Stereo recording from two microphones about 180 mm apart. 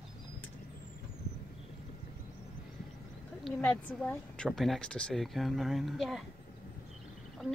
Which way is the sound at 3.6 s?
10° left (ahead or behind).